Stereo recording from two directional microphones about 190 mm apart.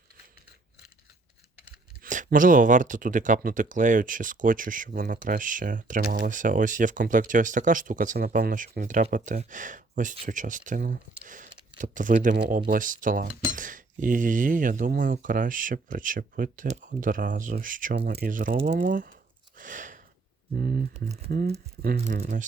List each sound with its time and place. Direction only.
2.0 s speech: 45° right (ahead or behind)
17.9 s speech: 55° right (ahead or behind)
18.5 s speech: 65° right (ahead or behind)
18.8 s speech: 45° right (ahead or behind)
19.5 s a sound: 45° right (ahead or behind)
20.6 s speech: 50° right (ahead or behind)
21.0 s speech: 35° right (ahead or behind)
21.2 s speech: 55° right (ahead or behind)
21.9 s speech: 35° right (ahead or behind)